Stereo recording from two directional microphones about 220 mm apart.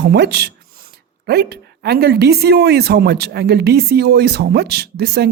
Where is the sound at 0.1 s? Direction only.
50° right (ahead or behind).